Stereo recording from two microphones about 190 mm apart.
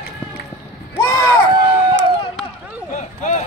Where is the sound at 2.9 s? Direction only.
40° left (ahead or behind).